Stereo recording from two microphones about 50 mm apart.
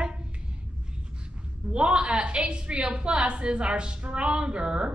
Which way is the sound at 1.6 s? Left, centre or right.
Right.